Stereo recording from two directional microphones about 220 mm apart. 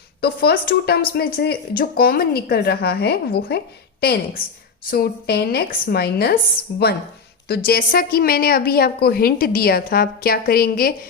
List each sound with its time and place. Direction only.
0.2 s a woman's voice: 45° left (ahead or behind)
4.9 s a woman's voice: 45° left (ahead or behind)